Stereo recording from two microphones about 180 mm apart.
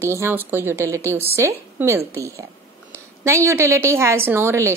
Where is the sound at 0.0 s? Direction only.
15° right (ahead or behind).